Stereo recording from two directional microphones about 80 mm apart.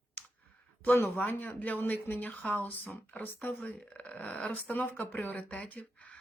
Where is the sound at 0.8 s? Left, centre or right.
Left.